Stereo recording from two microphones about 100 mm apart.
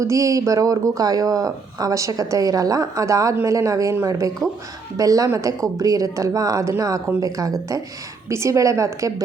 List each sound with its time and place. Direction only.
0.0 s speech: 30° right (ahead or behind)